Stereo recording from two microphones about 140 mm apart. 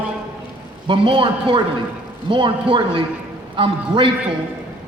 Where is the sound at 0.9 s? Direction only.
40° right (ahead or behind).